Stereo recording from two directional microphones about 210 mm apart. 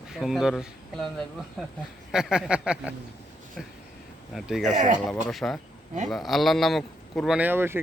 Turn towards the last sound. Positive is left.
turn(degrees=-10)  # may be behind; listen again after turning